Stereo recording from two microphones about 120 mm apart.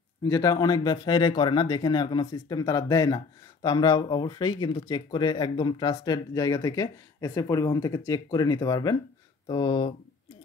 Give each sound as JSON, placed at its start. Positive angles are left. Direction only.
{"t": 0.2, "sound": "speech", "side_deg": 30}